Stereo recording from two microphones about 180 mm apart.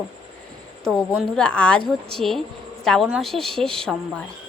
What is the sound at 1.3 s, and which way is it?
Speech, 5° left (ahead or behind).